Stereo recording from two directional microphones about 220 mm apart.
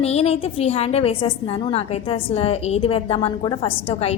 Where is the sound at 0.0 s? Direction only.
30° left (ahead or behind).